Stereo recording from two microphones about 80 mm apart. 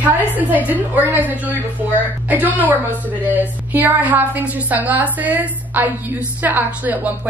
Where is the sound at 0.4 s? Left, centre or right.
Right.